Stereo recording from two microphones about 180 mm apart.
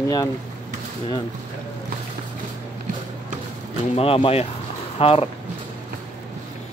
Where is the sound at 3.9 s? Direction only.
30° left (ahead or behind).